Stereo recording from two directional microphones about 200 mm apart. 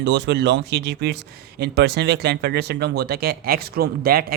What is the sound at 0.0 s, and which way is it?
Speech, 55° right (ahead or behind).